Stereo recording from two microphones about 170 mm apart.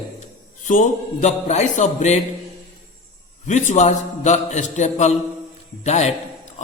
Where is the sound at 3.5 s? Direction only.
45° left (ahead or behind).